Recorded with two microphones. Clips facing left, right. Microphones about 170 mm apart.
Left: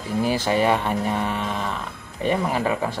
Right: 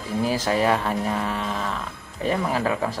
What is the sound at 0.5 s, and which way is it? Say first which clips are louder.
A man's voice: left 1 dB; centre (ahead or behind).